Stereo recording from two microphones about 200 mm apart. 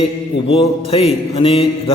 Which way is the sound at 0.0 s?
30° left (ahead or behind).